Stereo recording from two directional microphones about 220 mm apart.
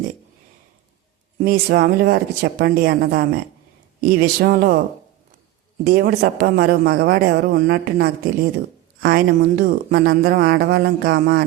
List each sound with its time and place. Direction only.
1.5 s speech: 45° right (ahead or behind)
5.8 s speech: 45° right (ahead or behind)